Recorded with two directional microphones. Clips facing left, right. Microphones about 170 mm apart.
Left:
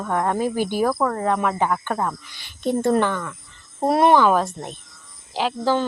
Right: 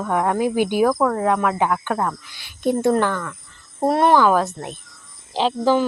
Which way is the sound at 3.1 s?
10° left (ahead or behind).